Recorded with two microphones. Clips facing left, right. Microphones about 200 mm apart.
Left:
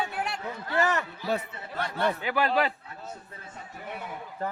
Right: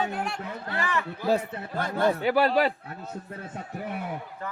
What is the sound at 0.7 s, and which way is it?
Speech, 40° left (ahead or behind).